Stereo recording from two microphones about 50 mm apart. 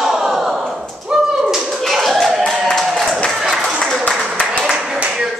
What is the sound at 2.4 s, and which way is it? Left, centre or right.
Clapping, centre.